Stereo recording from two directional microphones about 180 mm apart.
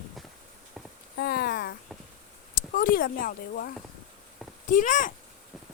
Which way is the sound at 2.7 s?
50° left (ahead or behind).